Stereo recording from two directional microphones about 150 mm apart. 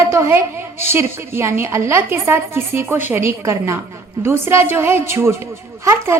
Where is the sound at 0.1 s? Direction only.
15° right (ahead or behind).